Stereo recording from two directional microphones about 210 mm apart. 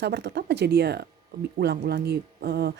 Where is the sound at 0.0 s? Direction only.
50° right (ahead or behind).